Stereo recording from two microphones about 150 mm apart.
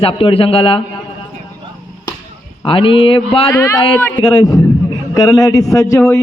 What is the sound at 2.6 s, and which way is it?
Speech, 35° left (ahead or behind).